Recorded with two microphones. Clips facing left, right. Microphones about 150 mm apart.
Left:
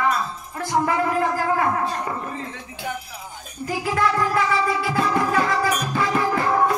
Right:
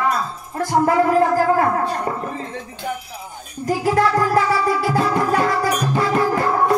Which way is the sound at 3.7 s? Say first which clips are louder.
Right 5 dB; 40° right (ahead or behind).